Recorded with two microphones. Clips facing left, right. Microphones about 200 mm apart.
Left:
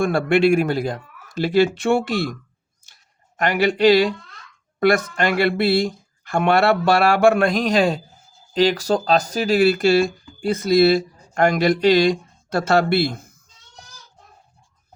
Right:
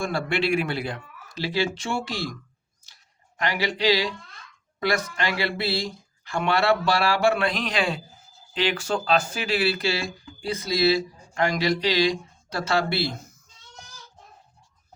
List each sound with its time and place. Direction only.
0.0 s speech: 55° left (ahead or behind)
2.8 s a sound: 50° left (ahead or behind)
4.8 s speech: 50° left (ahead or behind)